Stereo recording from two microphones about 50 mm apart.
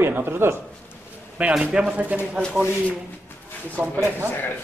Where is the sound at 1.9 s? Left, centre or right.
Right.